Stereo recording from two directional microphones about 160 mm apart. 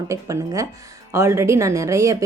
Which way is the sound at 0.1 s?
20° right (ahead or behind).